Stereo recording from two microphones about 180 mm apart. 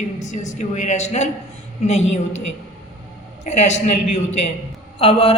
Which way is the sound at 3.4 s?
40° left (ahead or behind).